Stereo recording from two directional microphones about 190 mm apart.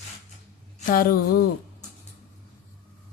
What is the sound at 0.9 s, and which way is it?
Speech, 50° left (ahead or behind).